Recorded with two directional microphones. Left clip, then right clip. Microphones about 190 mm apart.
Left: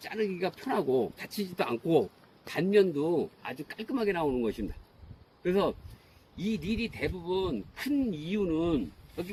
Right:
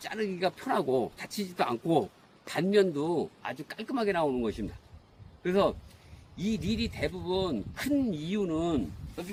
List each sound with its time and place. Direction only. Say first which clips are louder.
0.0 s speech: right 1 dB; 15° right (ahead or behind)